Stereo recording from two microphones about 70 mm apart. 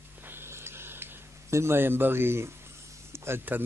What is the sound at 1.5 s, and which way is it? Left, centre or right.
Speech, right.